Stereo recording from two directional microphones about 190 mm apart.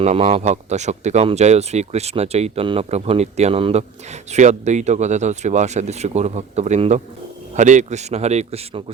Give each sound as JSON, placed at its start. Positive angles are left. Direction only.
{"t": 0.0, "sound": "speech", "side_deg": -35}